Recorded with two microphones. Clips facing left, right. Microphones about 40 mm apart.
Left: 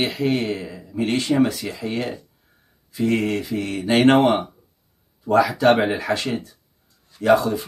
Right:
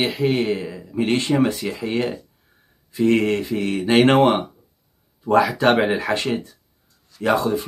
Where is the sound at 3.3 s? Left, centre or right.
Right.